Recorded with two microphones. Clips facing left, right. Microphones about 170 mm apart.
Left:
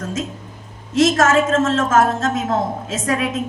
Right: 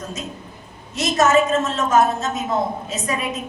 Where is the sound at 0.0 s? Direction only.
90° left.